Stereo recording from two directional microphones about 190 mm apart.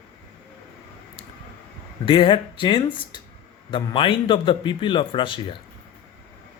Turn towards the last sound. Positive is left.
turn(degrees=25)  # may be behind; listen again after turning